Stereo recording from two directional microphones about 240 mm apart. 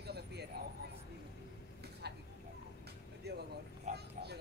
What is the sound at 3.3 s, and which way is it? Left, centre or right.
Vehicle, right.